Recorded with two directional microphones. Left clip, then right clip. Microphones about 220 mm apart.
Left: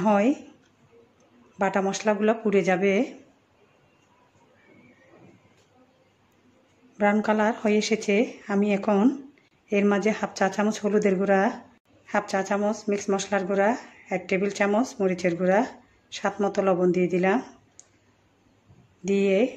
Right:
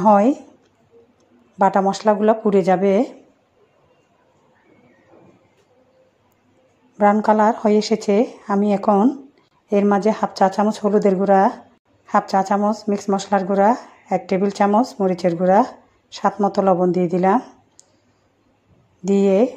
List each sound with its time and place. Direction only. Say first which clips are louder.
0.0 s speech: right 8 dB; 15° right (ahead or behind)
1.6 s speech: right 9 dB; 15° right (ahead or behind)
7.0 s speech: right 8 dB; 15° right (ahead or behind)
19.0 s speech: right 6 dB; 15° right (ahead or behind)